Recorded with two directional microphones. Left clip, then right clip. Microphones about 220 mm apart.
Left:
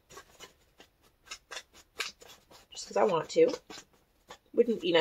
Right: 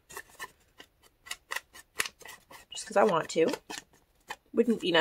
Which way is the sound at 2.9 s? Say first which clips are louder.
Right 1 dB; 20° right (ahead or behind).